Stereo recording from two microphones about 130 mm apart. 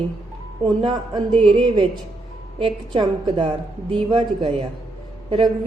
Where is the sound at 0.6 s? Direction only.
40° right (ahead or behind).